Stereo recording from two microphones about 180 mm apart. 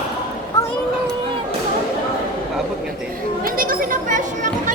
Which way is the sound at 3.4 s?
50° right (ahead or behind).